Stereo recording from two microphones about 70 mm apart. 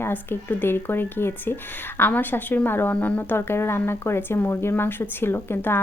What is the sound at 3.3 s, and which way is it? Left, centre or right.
Speech, left.